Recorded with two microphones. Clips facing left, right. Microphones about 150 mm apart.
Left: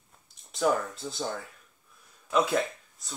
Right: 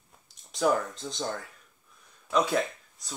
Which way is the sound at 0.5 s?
Centre (ahead or behind).